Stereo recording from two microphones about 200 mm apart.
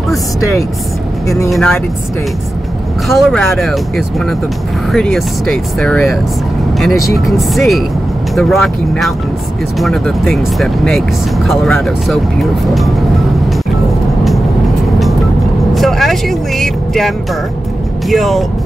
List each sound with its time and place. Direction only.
1.5 s speech: centre (ahead or behind)
3.1 s speech: centre (ahead or behind)
15.7 s vehicle: centre (ahead or behind)
18.0 s speech: centre (ahead or behind)